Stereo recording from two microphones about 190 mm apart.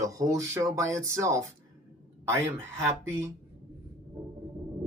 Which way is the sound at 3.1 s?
15° right (ahead or behind).